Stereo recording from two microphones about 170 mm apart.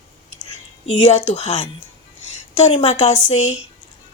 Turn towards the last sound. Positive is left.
turn(degrees=40)  # may be behind; listen again after turning